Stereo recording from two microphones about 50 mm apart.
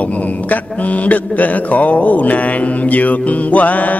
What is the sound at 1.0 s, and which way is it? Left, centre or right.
Mantra, left.